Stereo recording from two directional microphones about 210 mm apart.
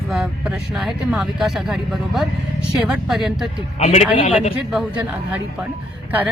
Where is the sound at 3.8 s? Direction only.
30° left (ahead or behind).